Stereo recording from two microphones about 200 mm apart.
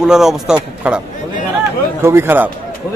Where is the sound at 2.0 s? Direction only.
10° right (ahead or behind).